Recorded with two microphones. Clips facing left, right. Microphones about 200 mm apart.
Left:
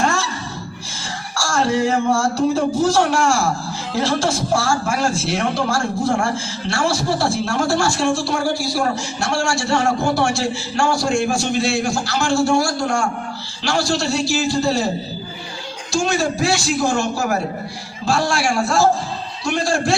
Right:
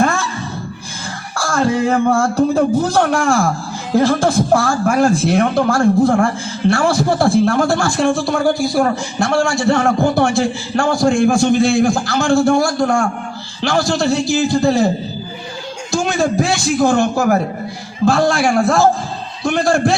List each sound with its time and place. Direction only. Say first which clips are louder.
0.0 s a sound: right 4 dB; 55° right (ahead or behind)
1.4 s a man's voice: right 2 dB; 55° right (ahead or behind)
15.9 s a man's voice: right 3 dB; 55° right (ahead or behind)